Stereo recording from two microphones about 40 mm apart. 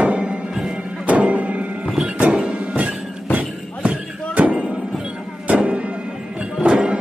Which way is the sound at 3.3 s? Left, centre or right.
Right.